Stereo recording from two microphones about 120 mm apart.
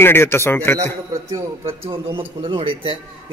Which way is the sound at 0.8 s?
30° right (ahead or behind).